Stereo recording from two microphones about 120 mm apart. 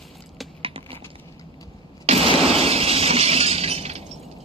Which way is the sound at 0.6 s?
50° right (ahead or behind).